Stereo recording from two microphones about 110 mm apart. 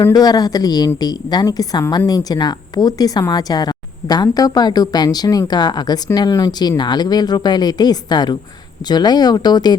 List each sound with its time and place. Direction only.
0.1 s a woman's voice: 35° left (ahead or behind)